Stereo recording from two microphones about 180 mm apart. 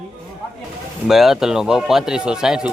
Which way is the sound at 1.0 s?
Centre (ahead or behind).